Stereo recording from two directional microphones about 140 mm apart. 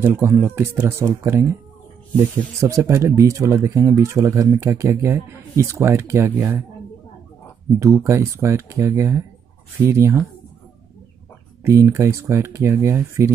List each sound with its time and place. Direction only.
0.0 s speech: 15° right (ahead or behind)
7.8 s speech: 20° right (ahead or behind)
11.6 s speech: 20° right (ahead or behind)